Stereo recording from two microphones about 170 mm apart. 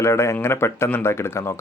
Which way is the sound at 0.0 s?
15° left (ahead or behind).